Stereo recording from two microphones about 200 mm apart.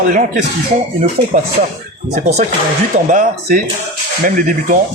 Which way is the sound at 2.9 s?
40° right (ahead or behind).